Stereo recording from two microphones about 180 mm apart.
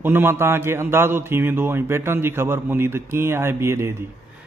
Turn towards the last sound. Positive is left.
turn(degrees=-15)  # may be behind; listen again after turning